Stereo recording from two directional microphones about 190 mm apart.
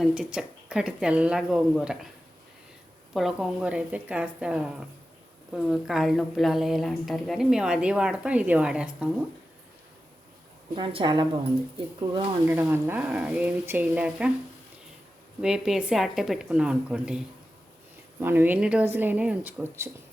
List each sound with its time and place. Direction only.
0.0 s speech: 5° right (ahead or behind)
3.1 s speech: centre (ahead or behind)
10.8 s a woman's voice: 25° right (ahead or behind)
12.5 s speech: 10° right (ahead or behind)
15.4 s speech: 5° right (ahead or behind)